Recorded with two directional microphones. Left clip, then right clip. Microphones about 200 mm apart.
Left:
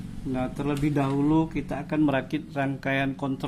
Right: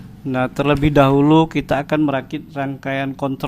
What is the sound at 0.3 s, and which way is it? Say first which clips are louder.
Speech: right 12 dB; 30° right (ahead or behind).